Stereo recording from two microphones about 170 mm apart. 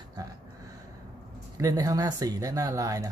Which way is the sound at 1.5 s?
20° right (ahead or behind).